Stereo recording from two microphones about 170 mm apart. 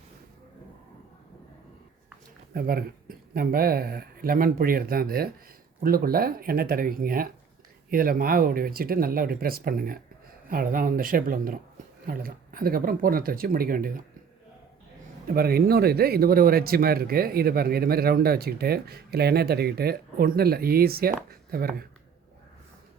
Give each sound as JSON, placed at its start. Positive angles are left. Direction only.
{"t": 2.5, "sound": "speech", "side_deg": -65}
{"t": 15.3, "sound": "speech", "side_deg": -65}